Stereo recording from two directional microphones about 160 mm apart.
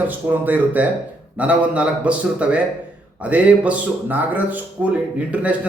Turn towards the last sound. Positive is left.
turn(degrees=-10)  # may be behind; listen again after turning